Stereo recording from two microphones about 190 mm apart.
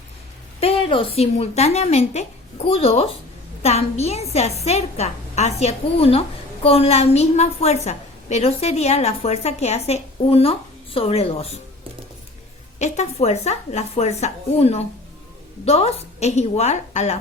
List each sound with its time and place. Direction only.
0.6 s a woman's voice: 30° left (ahead or behind)
12.8 s a woman's voice: 35° left (ahead or behind)